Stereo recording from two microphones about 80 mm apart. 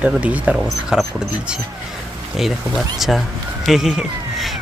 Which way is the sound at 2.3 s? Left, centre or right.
Centre.